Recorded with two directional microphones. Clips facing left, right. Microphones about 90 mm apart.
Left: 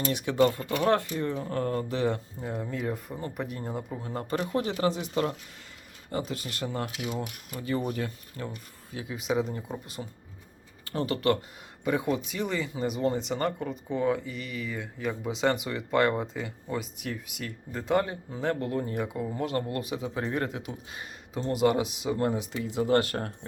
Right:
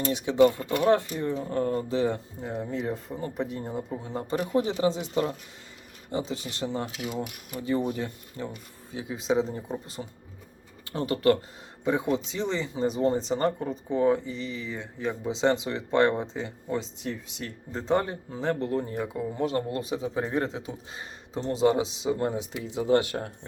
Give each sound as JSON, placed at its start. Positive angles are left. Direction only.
{"t": 0.1, "sound": "speech", "side_deg": -15}
{"t": 3.7, "sound": "a man's voice", "side_deg": 20}
{"t": 3.9, "sound": "speech", "side_deg": -15}
{"t": 6.1, "sound": "speech", "side_deg": -20}
{"t": 10.0, "sound": "speech", "side_deg": 5}
{"t": 10.9, "sound": "speech", "side_deg": -25}